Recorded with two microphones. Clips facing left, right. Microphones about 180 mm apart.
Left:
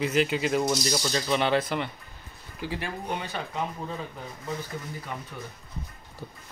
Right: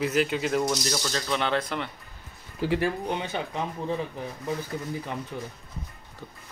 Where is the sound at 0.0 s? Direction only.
Centre (ahead or behind).